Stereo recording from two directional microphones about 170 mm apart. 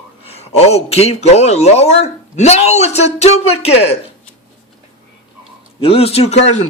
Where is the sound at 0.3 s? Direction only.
40° left (ahead or behind).